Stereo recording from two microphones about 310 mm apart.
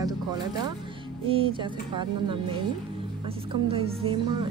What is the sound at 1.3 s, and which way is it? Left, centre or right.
A woman's voice, centre.